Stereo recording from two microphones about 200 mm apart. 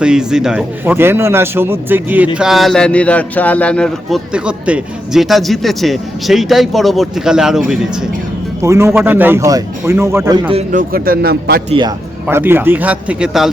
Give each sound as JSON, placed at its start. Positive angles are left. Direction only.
{"t": 0.0, "sound": "a man's voice", "side_deg": -5}
{"t": 8.6, "sound": "a man's voice", "side_deg": -15}
{"t": 10.5, "sound": "a man's voice", "side_deg": -35}
{"t": 11.7, "sound": "speech", "side_deg": -20}
{"t": 12.3, "sound": "a man's voice", "side_deg": -10}